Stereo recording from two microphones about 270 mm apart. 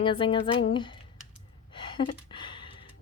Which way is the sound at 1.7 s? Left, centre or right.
Centre.